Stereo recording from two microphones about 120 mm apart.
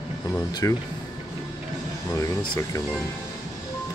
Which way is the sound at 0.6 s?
30° left (ahead or behind).